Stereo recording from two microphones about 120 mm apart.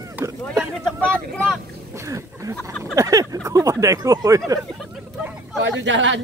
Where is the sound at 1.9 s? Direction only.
25° right (ahead or behind).